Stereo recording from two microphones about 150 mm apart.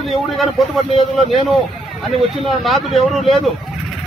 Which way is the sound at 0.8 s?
45° left (ahead or behind).